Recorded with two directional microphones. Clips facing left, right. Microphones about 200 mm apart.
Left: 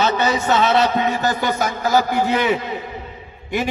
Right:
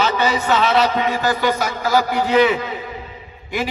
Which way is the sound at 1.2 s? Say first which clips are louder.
Right 1 dB; 45° left (ahead or behind).